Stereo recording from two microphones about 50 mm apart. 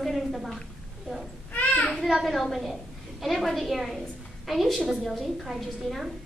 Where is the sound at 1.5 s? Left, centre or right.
Left.